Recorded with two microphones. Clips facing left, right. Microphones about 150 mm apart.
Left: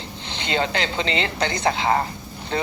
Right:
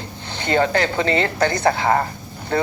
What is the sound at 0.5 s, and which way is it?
Speech, 50° right (ahead or behind).